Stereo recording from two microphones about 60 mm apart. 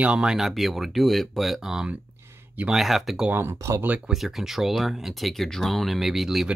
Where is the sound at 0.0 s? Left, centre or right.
Centre.